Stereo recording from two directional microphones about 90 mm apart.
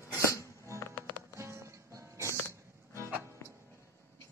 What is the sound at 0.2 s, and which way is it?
Music, 35° left (ahead or behind).